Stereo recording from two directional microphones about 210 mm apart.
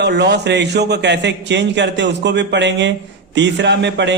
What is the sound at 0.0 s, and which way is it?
A man's voice, 55° right (ahead or behind).